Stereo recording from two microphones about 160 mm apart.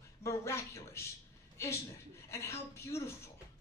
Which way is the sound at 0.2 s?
20° left (ahead or behind).